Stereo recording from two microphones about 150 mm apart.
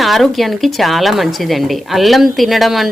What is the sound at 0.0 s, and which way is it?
Speech, centre (ahead or behind).